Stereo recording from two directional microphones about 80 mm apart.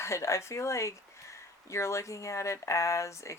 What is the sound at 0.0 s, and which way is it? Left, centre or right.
Speech, left.